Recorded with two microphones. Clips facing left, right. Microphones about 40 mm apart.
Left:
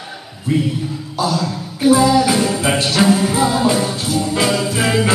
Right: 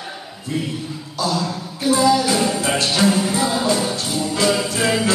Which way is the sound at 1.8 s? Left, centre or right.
Centre.